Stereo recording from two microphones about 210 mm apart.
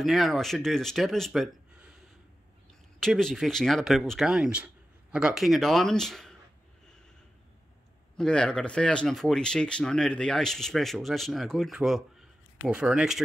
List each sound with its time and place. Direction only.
0.0 s speech: centre (ahead or behind)
3.0 s speech: centre (ahead or behind)
8.2 s speech: 5° left (ahead or behind)